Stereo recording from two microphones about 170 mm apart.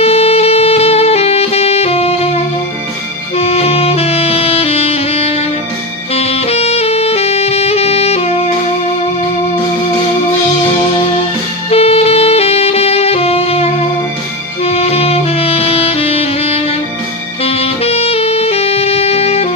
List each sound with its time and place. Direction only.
0.0 s music: 35° left (ahead or behind)
3.3 s saxophone: 35° left (ahead or behind)
11.7 s saxophone: 35° left (ahead or behind)